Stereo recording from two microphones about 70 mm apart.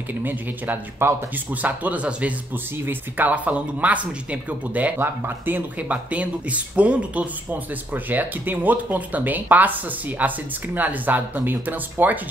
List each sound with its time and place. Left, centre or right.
0.2 s speech: right
5.8 s speech: centre